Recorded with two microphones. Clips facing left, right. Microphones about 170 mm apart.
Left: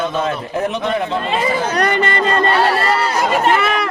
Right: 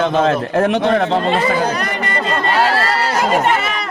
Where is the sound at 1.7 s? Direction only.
65° left (ahead or behind).